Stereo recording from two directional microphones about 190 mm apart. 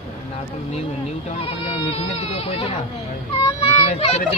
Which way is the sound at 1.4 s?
30° left (ahead or behind).